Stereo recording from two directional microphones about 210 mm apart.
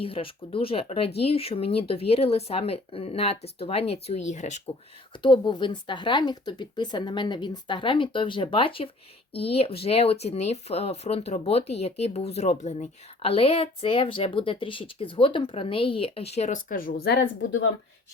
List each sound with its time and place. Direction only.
0.0 s speech: 25° left (ahead or behind)
5.2 s speech: 20° left (ahead or behind); by 17.7 s 60° left (ahead or behind)